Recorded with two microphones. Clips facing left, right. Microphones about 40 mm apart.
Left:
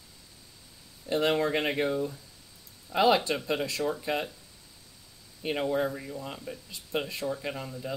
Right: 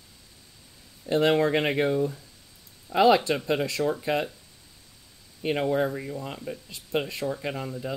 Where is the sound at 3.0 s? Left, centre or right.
Right.